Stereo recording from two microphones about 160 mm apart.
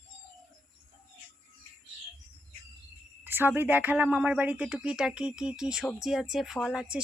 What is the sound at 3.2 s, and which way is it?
Speech, 10° right (ahead or behind).